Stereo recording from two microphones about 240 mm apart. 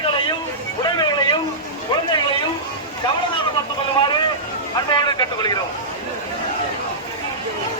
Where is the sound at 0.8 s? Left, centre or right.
Centre.